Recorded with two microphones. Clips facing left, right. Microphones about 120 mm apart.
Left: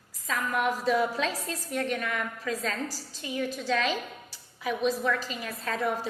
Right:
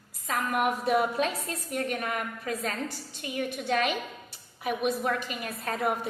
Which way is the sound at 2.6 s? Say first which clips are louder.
Even; 60° right (ahead or behind).